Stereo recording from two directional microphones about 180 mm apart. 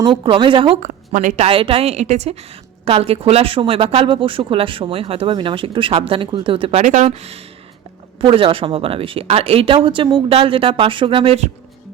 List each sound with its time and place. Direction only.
0.0 s speech: 30° right (ahead or behind)
0.8 s a woman's voice: 45° right (ahead or behind)
1.5 s speech: 30° right (ahead or behind)